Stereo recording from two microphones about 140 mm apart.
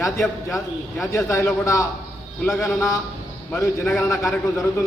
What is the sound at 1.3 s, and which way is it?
Speech, 20° left (ahead or behind).